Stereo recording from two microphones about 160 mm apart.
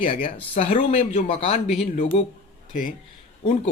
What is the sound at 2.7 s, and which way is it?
Speech, 55° left (ahead or behind).